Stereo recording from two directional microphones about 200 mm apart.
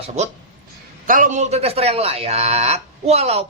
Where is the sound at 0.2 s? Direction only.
35° right (ahead or behind).